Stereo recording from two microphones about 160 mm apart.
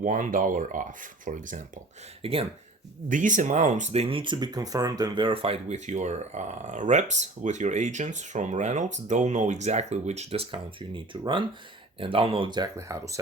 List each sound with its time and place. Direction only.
0.0 s speech: 55° right (ahead or behind)
2.2 s speech: 35° right (ahead or behind)
3.1 s speech: 55° right (ahead or behind); by 13.1 s 20° right (ahead or behind)